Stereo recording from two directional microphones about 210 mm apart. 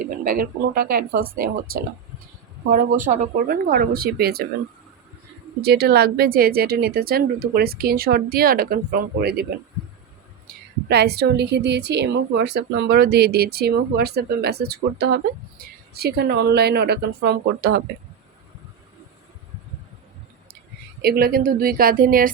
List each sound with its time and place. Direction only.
0.1 s a woman's voice: 45° right (ahead or behind)
5.6 s a woman's voice: 50° right (ahead or behind)
21.0 s a woman's voice: 45° right (ahead or behind)